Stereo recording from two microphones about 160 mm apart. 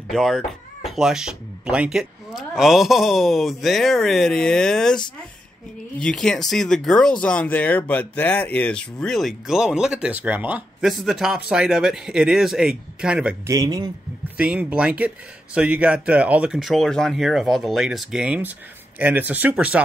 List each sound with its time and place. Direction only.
0.1 s speech: centre (ahead or behind)
13.5 s speech: 25° right (ahead or behind)
14.3 s speech: 10° right (ahead or behind)